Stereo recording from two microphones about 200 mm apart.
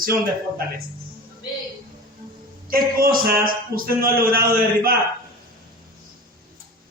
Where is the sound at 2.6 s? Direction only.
45° right (ahead or behind).